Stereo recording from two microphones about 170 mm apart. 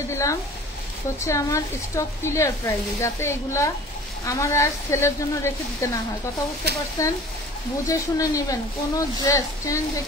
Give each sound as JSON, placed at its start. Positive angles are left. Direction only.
{"t": 0.1, "sound": "speech", "side_deg": 20}
{"t": 7.0, "sound": "speech", "side_deg": 20}